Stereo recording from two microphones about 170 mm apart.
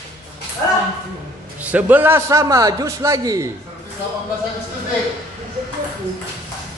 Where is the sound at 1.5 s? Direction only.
10° right (ahead or behind).